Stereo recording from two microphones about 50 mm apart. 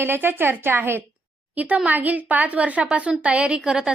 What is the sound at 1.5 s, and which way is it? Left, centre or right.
A woman's voice, right.